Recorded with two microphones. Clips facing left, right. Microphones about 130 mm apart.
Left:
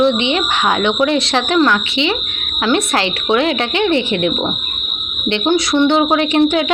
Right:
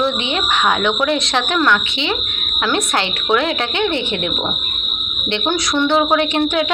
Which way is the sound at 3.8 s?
30° right (ahead or behind).